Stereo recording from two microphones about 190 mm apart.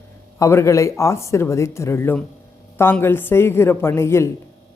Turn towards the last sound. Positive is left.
turn(degrees=15)  # may be behind; listen again after turning